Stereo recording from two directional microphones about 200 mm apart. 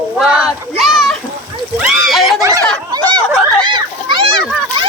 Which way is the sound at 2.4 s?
15° right (ahead or behind).